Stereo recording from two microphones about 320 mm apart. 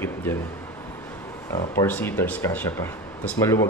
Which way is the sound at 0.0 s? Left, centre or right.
Centre.